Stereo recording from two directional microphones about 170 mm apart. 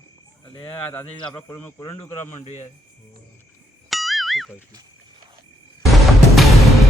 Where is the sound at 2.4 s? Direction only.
45° left (ahead or behind).